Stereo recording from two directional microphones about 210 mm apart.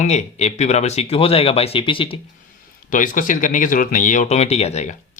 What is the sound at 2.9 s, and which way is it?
A man's voice, 40° left (ahead or behind).